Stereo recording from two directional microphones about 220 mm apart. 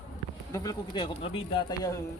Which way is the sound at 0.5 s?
15° left (ahead or behind).